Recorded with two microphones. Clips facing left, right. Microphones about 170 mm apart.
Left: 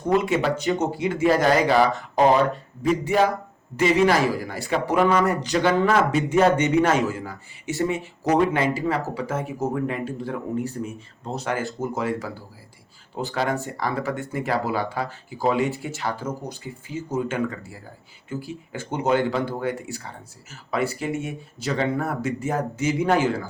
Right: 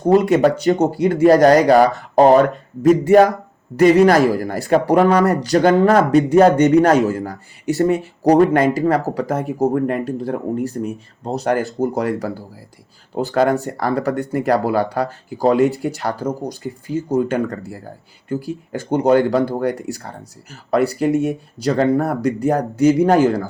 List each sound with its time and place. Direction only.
0.1 s speech: 40° right (ahead or behind)
9.7 s speech: 50° right (ahead or behind)